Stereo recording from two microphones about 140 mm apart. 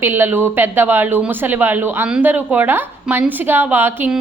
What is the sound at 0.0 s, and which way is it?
Speech, 15° right (ahead or behind).